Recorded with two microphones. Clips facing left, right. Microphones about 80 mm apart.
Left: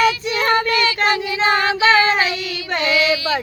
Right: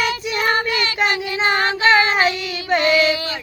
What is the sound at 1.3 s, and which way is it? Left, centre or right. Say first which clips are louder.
Child singing: left 2 dB; right.